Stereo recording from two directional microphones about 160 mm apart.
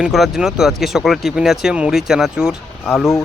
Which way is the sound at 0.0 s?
Centre (ahead or behind).